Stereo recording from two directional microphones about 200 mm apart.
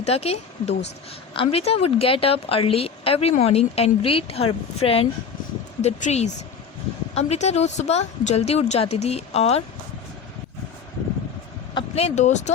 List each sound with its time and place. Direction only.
0.0 s a woman's voice: 30° left (ahead or behind)
0.7 s speech: 60° left (ahead or behind)
1.3 s a woman's voice: 25° left (ahead or behind)
11.7 s speech: 30° left (ahead or behind)